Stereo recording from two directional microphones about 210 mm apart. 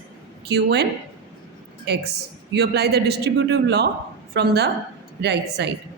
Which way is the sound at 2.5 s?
50° right (ahead or behind).